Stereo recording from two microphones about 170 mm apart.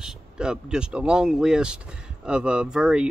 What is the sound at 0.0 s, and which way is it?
Speech, 5° right (ahead or behind).